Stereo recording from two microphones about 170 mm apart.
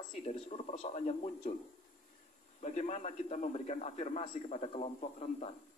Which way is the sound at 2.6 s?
45° left (ahead or behind).